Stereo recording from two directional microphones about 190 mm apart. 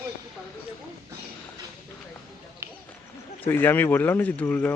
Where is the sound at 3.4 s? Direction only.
10° left (ahead or behind).